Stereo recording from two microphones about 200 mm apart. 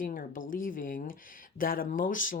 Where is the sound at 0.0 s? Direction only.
45° left (ahead or behind).